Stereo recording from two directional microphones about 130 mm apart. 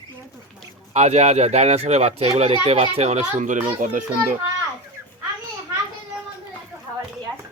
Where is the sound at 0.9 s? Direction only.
60° right (ahead or behind).